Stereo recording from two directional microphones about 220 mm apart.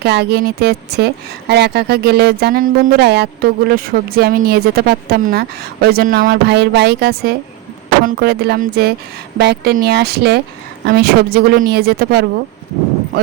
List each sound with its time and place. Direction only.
0.0 s speech: 50° right (ahead or behind)